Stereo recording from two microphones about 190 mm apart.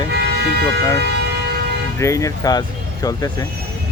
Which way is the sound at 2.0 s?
15° left (ahead or behind).